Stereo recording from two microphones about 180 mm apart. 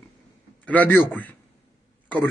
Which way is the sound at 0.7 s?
10° left (ahead or behind).